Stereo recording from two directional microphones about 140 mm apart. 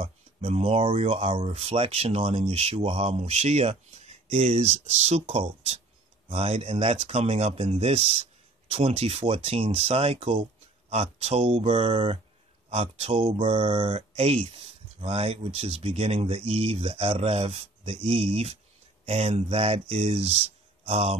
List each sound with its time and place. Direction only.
0.0 s speech: 45° right (ahead or behind)